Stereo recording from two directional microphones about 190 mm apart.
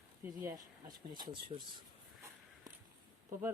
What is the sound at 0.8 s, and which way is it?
Speech, 25° right (ahead or behind).